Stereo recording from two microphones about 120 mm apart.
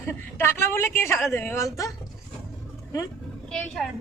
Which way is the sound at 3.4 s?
5° left (ahead or behind).